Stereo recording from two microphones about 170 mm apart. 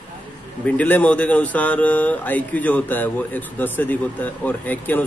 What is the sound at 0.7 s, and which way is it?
Speech, 10° left (ahead or behind).